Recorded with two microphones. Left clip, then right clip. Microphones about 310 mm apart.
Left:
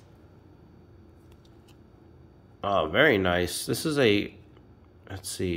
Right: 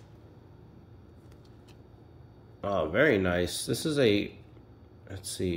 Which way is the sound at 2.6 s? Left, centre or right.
Centre.